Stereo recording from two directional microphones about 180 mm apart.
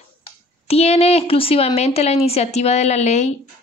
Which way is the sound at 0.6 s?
35° left (ahead or behind).